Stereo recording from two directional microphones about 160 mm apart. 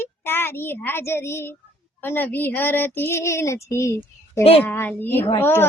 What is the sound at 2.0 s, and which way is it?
Child singing, 10° left (ahead or behind).